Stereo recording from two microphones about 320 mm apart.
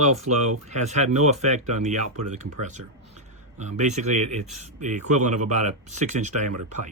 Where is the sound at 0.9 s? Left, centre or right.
Right.